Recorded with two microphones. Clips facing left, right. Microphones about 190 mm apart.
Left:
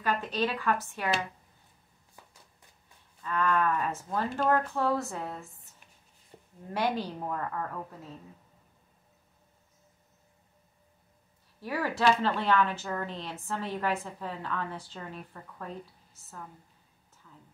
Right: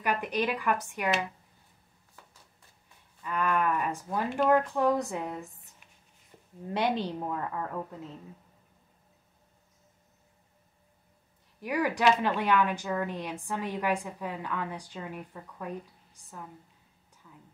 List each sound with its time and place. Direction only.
0.0 s speech: 15° right (ahead or behind)
3.3 s speech: 15° right (ahead or behind)
6.3 s a sound: 30° left (ahead or behind)
6.7 s a woman's voice: 20° right (ahead or behind)
11.6 s speech: 15° right (ahead or behind)
17.2 s a sound: 15° right (ahead or behind)